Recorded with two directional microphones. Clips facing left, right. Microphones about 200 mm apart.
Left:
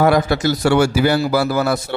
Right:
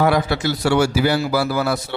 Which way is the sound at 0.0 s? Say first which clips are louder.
Left 3 dB; 45° left (ahead or behind).